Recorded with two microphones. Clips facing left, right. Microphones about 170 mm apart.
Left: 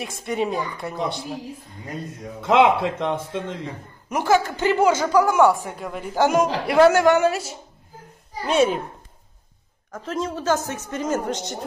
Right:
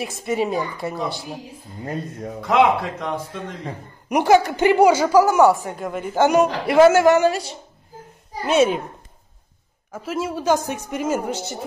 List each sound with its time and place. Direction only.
0.0 s speech: centre (ahead or behind)
2.4 s a man's voice: 25° left (ahead or behind)
4.1 s speech: 15° right (ahead or behind); by 7.4 s centre (ahead or behind)
8.5 s speech: centre (ahead or behind)
9.8 s a woman's voice: 10° right (ahead or behind)